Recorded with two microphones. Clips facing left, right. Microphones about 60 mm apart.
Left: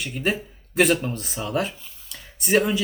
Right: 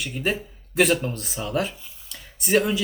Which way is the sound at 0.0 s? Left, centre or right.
Centre.